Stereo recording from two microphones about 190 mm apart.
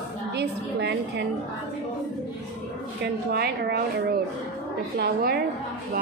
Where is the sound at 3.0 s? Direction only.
55° right (ahead or behind).